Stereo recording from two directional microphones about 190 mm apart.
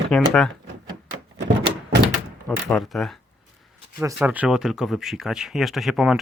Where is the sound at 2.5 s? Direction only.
Centre (ahead or behind).